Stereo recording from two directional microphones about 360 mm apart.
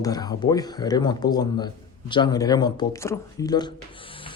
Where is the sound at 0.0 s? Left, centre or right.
Centre.